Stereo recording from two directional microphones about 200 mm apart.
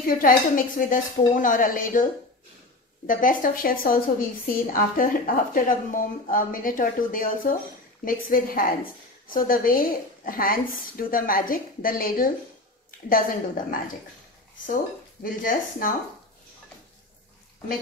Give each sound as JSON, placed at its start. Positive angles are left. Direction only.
{"t": 0.0, "sound": "a woman's voice", "side_deg": 45}
{"t": 3.1, "sound": "a woman's voice", "side_deg": 40}
{"t": 15.2, "sound": "a woman's voice", "side_deg": 45}